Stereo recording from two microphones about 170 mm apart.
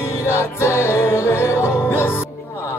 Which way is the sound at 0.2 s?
15° left (ahead or behind).